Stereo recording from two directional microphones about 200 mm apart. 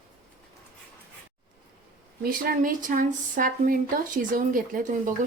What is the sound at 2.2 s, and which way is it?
Speech, 45° right (ahead or behind).